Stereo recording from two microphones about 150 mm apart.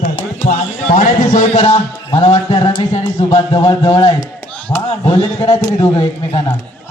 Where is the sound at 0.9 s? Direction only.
60° left (ahead or behind); by 6.5 s 45° left (ahead or behind).